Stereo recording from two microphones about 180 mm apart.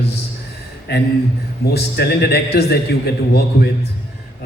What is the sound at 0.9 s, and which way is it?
A man's voice, 65° left (ahead or behind).